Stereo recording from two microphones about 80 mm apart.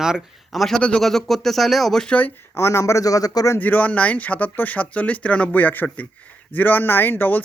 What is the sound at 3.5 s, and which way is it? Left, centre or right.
Speech, left.